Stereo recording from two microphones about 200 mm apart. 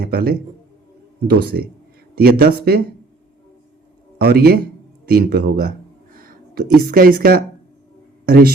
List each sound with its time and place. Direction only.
0.0 s speech: 50° right (ahead or behind)
4.2 s speech: 50° right (ahead or behind)